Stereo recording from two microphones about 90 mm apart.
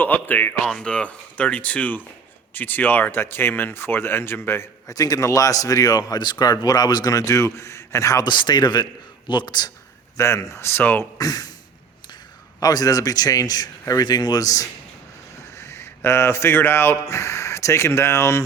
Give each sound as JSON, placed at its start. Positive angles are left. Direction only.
{"t": 0.0, "sound": "speech", "side_deg": 20}
{"t": 0.6, "sound": "a man's voice", "side_deg": 5}
{"t": 8.2, "sound": "a man's voice", "side_deg": 55}
{"t": 10.2, "sound": "speech", "side_deg": 35}
{"t": 11.2, "sound": "speech", "side_deg": 45}
{"t": 12.5, "sound": "a man's voice", "side_deg": 45}
{"t": 15.5, "sound": "speech", "side_deg": 30}